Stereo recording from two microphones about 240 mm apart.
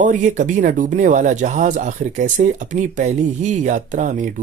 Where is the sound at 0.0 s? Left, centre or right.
Right.